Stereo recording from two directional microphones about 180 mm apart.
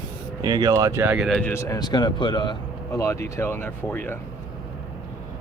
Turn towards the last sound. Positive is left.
turn(degrees=10)  # may be behind; listen again after turning